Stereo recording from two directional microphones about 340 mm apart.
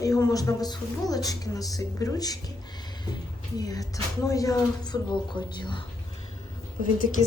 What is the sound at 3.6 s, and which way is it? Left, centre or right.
A woman's voice, centre.